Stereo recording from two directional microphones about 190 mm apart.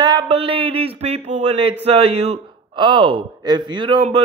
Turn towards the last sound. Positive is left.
turn(degrees=-30)  # may be behind; listen again after turning